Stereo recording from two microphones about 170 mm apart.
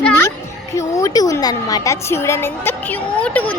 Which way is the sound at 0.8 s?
20° left (ahead or behind).